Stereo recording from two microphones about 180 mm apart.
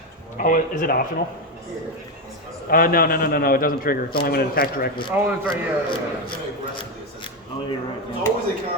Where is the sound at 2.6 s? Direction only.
50° left (ahead or behind).